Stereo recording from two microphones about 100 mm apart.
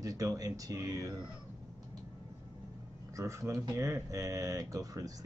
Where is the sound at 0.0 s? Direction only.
35° right (ahead or behind).